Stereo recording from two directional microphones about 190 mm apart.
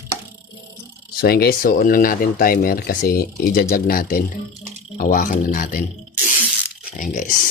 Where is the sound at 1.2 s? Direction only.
55° left (ahead or behind).